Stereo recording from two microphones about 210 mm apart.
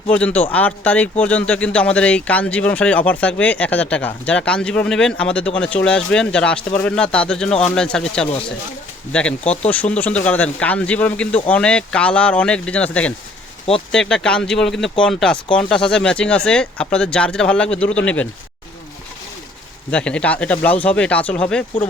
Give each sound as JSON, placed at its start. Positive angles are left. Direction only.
{"t": 0.1, "sound": "speech", "side_deg": 5}
{"t": 19.9, "sound": "speech", "side_deg": 5}